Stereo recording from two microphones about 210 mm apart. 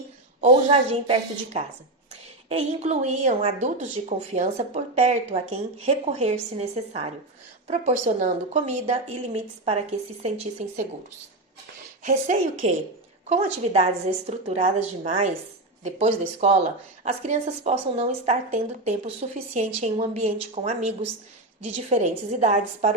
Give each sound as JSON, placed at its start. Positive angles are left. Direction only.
{"t": 0.4, "sound": "speech", "side_deg": -30}
{"t": 2.5, "sound": "speech", "side_deg": -30}
{"t": 12.0, "sound": "speech", "side_deg": -35}